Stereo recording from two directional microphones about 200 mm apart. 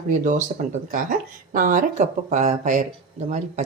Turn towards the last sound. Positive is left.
turn(degrees=-40)  # may be behind; listen again after turning